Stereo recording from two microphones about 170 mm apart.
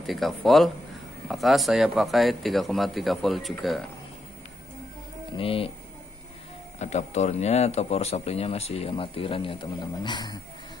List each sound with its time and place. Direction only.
0.0 s speech: centre (ahead or behind)
5.4 s speech: 35° left (ahead or behind)
6.8 s speech: 40° left (ahead or behind); by 10.4 s 25° left (ahead or behind)